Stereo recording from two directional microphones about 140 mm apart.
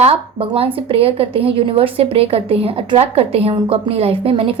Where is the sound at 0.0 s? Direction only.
40° right (ahead or behind).